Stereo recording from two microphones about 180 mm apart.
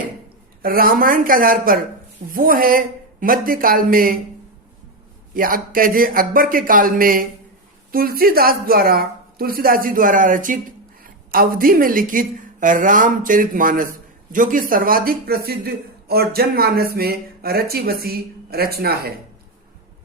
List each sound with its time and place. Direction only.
0.6 s a woman's voice: 55° right (ahead or behind)
5.3 s a woman's voice: 50° right (ahead or behind)